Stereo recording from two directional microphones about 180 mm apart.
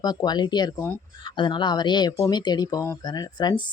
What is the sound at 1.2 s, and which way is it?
Speech, 25° left (ahead or behind).